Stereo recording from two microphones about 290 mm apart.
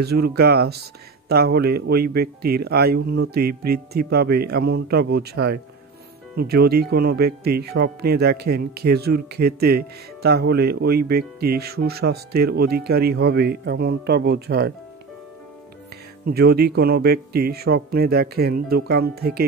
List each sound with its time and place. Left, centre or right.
0.0 s speech: right
16.3 s speech: right